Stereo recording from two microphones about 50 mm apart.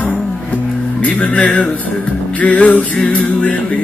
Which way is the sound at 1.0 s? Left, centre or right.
Left.